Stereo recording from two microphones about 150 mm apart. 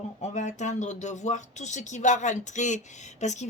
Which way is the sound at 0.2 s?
50° left (ahead or behind).